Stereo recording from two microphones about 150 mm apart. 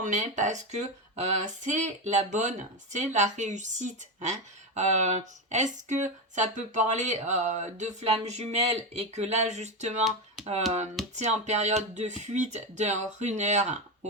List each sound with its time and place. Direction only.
0.0 s speech: 55° right (ahead or behind)
11.1 s speech: 50° right (ahead or behind)